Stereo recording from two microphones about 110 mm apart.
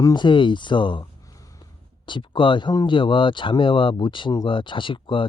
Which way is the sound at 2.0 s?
45° left (ahead or behind).